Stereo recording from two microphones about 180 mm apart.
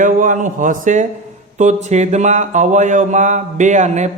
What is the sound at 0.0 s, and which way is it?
A man's voice, 45° right (ahead or behind).